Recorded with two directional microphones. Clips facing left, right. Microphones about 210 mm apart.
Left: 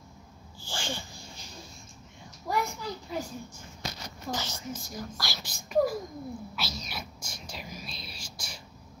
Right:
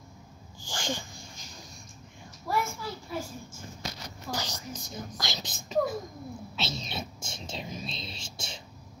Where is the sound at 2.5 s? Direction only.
20° left (ahead or behind).